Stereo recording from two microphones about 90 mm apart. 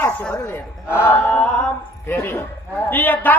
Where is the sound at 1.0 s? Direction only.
25° left (ahead or behind).